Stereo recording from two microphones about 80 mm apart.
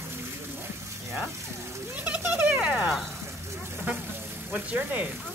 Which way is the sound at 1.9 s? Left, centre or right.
Centre.